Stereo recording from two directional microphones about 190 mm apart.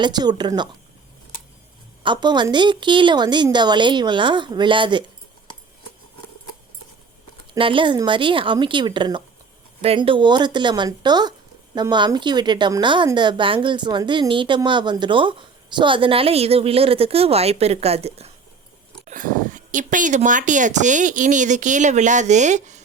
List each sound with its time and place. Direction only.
0.0 s speech: 20° right (ahead or behind)
2.0 s speech: 25° right (ahead or behind)
7.5 s speech: 25° right (ahead or behind)
19.0 s speech: 45° right (ahead or behind)